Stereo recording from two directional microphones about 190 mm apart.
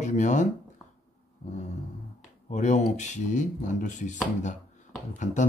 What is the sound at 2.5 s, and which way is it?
Speech, 40° left (ahead or behind).